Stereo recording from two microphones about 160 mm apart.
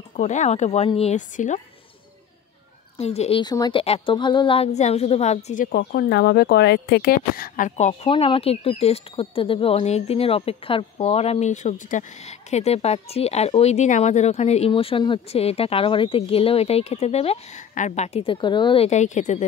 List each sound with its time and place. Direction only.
0.1 s a woman's voice: 50° left (ahead or behind)
3.0 s a woman's voice: 40° left (ahead or behind)
8.1 s speech: 35° left (ahead or behind)
18.9 s a woman's voice: 50° left (ahead or behind)